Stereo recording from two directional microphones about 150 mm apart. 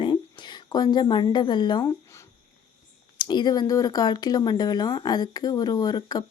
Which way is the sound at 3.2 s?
30° left (ahead or behind).